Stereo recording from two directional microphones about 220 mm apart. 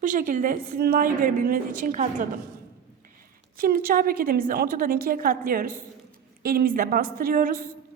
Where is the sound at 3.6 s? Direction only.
40° right (ahead or behind).